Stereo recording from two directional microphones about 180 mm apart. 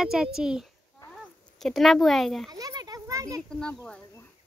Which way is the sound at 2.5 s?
20° right (ahead or behind).